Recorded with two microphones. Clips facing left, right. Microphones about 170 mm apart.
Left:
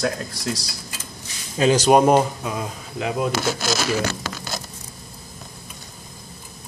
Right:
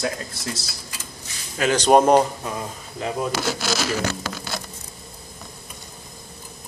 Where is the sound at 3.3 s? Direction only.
50° left (ahead or behind).